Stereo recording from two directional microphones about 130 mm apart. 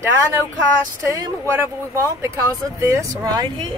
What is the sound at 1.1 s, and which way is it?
Speech, 20° right (ahead or behind).